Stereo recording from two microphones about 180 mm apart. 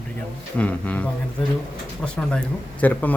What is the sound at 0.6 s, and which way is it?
Speech, 10° left (ahead or behind).